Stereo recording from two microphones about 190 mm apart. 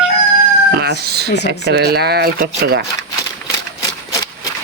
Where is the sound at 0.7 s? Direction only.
55° right (ahead or behind).